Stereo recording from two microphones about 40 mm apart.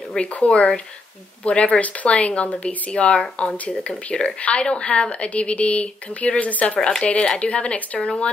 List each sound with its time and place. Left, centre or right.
0.2 s speech: left